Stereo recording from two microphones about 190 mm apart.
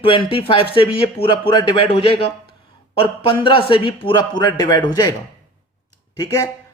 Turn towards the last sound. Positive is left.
turn(degrees=20)  # may be behind; listen again after turning